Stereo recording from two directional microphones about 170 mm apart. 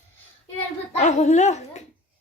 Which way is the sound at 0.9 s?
45° left (ahead or behind).